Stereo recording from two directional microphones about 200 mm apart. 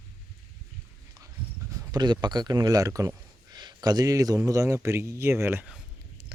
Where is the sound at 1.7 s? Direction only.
15° right (ahead or behind).